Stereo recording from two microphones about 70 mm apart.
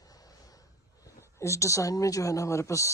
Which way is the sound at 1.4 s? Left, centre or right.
Left.